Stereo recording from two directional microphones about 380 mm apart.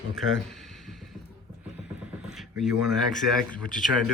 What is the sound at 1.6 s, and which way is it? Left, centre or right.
Speech, centre.